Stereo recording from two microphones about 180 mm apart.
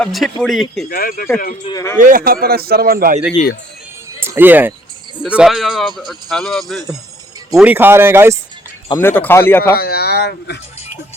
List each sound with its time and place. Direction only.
0.0 s speech: centre (ahead or behind)
0.9 s speech: 55° left (ahead or behind)
1.6 s speech: 20° left (ahead or behind)
2.0 s speech: 50° right (ahead or behind)
4.2 s speech: 10° right (ahead or behind)
9.0 s speech: 10° left (ahead or behind)
9.7 s speech: 60° left (ahead or behind)